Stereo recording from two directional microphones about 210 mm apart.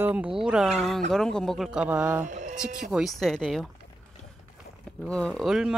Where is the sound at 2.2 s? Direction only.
35° right (ahead or behind).